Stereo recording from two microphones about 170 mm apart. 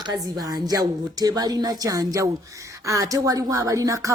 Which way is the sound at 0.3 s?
20° right (ahead or behind).